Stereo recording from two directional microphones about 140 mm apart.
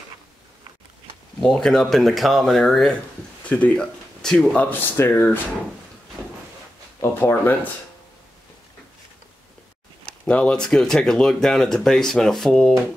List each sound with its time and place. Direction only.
1.4 s speech: 5° left (ahead or behind)
7.0 s speech: 15° left (ahead or behind)
10.0 s speech: 5° left (ahead or behind)